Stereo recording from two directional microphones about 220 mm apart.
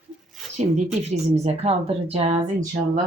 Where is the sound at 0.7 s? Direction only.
30° right (ahead or behind).